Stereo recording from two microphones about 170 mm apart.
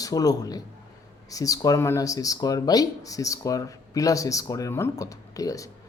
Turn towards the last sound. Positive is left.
turn(degrees=20)  # may be behind; listen again after turning